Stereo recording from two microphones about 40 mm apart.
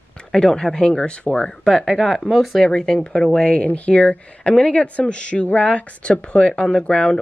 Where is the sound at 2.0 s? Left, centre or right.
Centre.